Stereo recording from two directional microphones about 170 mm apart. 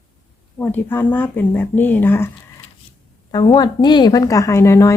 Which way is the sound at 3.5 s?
25° left (ahead or behind).